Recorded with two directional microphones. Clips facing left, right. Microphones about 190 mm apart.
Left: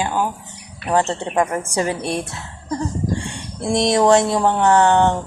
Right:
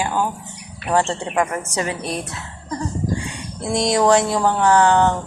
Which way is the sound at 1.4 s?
30° left (ahead or behind).